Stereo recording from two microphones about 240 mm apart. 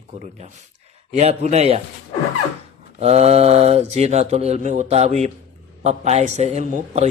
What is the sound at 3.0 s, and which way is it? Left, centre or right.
Speech, right.